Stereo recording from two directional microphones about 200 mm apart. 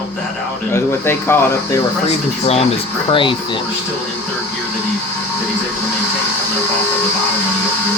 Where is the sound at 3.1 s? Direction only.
25° left (ahead or behind).